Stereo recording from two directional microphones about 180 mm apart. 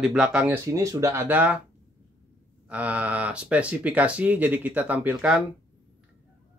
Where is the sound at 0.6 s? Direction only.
15° right (ahead or behind).